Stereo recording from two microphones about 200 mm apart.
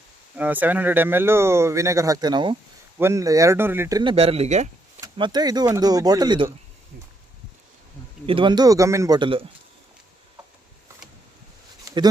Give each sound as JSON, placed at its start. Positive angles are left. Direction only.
{"t": 0.3, "sound": "speech", "side_deg": -10}
{"t": 4.1, "sound": "speech", "side_deg": -30}
{"t": 4.9, "sound": "speech", "side_deg": -20}
{"t": 8.3, "sound": "speech", "side_deg": -25}
{"t": 11.9, "sound": "a sound", "side_deg": -15}